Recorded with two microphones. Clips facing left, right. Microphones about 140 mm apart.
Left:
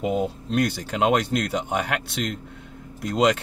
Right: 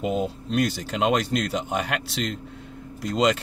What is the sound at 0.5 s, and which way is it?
Speech, 60° left (ahead or behind).